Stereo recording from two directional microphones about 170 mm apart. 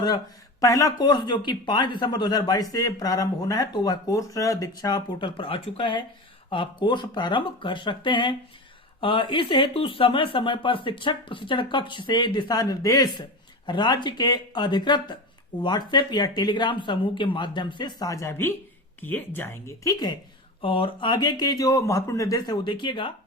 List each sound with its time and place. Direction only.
0.6 s speech: 20° left (ahead or behind)